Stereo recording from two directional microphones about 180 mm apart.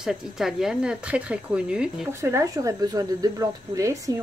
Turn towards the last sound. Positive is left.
turn(degrees=-15)  # may be behind; listen again after turning